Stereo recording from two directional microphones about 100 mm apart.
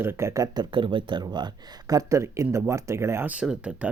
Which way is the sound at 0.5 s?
55° right (ahead or behind).